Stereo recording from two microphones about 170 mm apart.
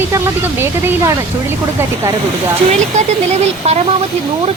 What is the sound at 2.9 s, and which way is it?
Speech, 40° right (ahead or behind).